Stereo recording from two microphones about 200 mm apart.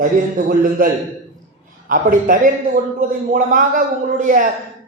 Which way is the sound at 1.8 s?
40° right (ahead or behind).